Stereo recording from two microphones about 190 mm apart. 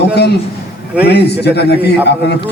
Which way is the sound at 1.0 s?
60° left (ahead or behind).